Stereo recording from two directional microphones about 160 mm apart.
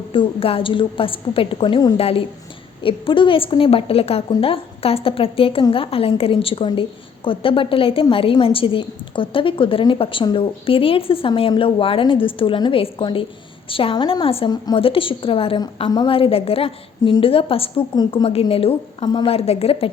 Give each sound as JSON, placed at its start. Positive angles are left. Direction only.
{"t": 0.1, "sound": "a woman's voice", "side_deg": 35}
{"t": 2.0, "sound": "a woman's voice", "side_deg": 40}